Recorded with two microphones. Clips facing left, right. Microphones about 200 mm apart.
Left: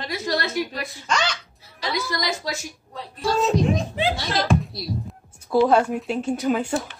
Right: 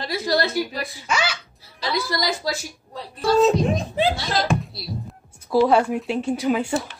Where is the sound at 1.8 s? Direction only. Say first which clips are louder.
Right 2 dB; 35° right (ahead or behind).